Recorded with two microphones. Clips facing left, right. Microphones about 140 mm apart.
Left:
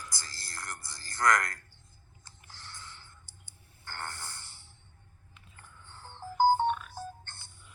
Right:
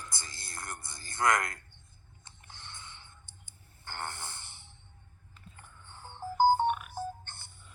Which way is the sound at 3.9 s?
20° right (ahead or behind).